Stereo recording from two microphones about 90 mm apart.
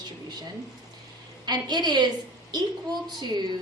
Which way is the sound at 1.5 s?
55° right (ahead or behind).